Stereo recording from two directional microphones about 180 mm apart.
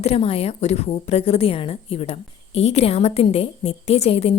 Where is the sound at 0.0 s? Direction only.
35° left (ahead or behind).